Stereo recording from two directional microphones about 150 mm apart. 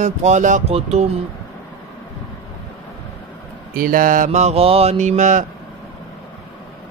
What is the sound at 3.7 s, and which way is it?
Mantra, 70° right (ahead or behind).